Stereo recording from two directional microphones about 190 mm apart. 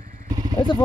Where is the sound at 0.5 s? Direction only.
25° left (ahead or behind).